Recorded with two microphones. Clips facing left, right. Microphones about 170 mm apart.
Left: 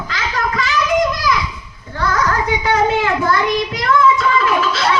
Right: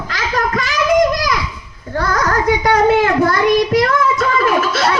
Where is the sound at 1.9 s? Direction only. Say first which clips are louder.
Right 1 dB; 40° right (ahead or behind).